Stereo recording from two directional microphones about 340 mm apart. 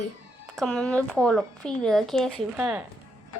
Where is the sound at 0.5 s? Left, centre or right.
Centre.